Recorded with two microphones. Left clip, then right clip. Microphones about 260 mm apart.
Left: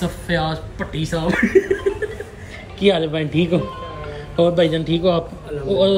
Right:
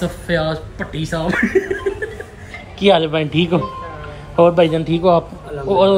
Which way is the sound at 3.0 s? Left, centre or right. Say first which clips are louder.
Right 3 dB; right.